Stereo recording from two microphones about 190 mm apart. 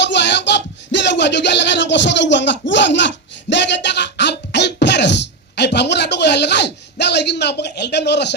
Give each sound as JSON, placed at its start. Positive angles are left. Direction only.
{"t": 0.0, "sound": "music", "side_deg": 65}